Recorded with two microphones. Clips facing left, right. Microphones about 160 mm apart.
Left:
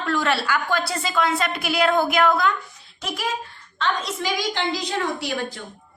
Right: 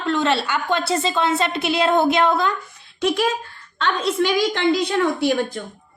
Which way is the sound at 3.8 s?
65° right (ahead or behind).